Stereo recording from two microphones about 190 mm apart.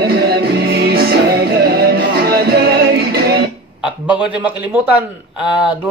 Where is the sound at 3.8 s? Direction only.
5° right (ahead or behind).